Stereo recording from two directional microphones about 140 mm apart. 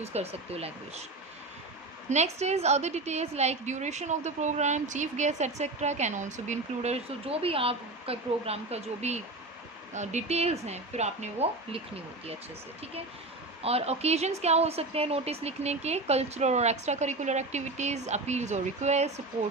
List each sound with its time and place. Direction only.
0.0 s a woman's voice: 50° right (ahead or behind)
2.0 s a woman's voice: 50° right (ahead or behind)
13.6 s a woman's voice: 45° right (ahead or behind)